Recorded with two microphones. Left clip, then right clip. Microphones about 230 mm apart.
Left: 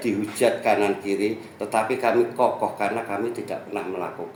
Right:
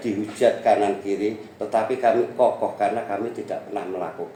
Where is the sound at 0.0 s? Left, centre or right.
Left.